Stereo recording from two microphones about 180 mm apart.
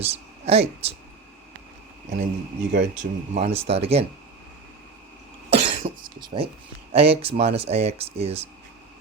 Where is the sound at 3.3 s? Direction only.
35° right (ahead or behind).